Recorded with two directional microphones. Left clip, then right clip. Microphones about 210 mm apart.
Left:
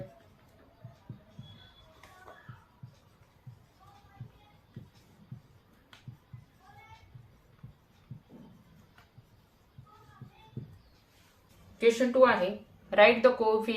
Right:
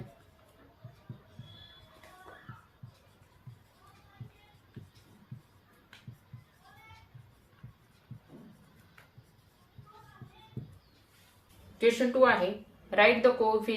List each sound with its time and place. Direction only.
11.8 s speech: 10° left (ahead or behind)